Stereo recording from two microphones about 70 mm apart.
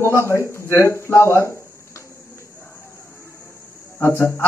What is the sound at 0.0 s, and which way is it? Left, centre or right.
Speech, left.